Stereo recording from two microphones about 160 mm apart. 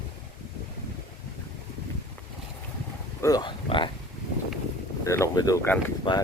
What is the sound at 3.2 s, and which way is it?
Speech, 20° left (ahead or behind).